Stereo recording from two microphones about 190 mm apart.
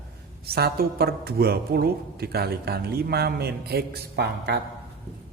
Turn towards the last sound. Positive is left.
turn(degrees=-60)  # may be behind; listen again after turning